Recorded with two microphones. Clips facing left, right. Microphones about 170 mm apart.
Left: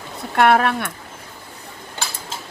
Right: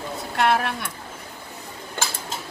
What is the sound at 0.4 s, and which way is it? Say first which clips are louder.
Speech: left 6 dB; 60° left (ahead or behind).